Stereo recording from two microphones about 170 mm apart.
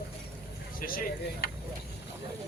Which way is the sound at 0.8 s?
55° left (ahead or behind).